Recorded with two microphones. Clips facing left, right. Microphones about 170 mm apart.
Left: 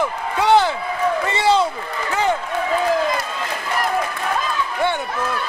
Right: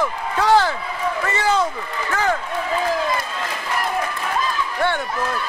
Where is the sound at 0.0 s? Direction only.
20° left (ahead or behind).